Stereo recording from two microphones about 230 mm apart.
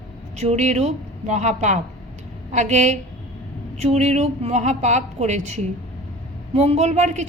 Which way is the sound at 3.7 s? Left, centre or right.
Right.